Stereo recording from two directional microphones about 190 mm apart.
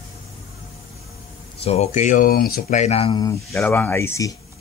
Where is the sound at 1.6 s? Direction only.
30° left (ahead or behind); by 4.4 s 15° left (ahead or behind).